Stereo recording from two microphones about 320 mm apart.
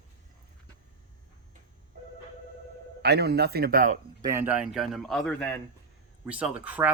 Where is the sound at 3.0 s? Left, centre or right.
Right.